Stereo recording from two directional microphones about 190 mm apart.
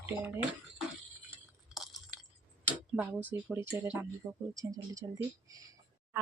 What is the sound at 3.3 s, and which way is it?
Speech, 15° right (ahead or behind).